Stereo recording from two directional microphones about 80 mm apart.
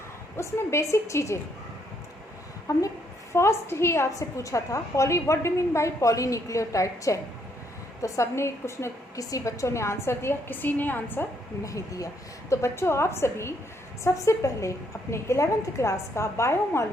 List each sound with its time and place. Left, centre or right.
0.3 s a woman's voice: left
2.7 s speech: left
3.3 s a woman's voice: left
11.6 s a woman's voice: left